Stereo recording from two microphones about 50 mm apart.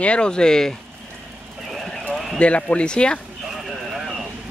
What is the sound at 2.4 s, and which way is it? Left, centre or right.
Speech, left.